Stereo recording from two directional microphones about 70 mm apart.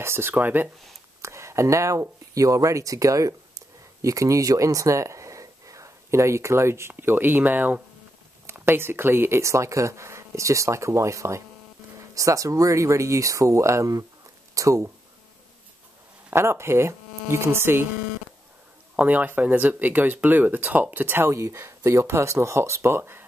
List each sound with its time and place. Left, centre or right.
0.0 s speech: right
1.2 s speech: right
9.4 s speech: right
16.3 s speech: right
18.9 s speech: right
21.3 s speech: right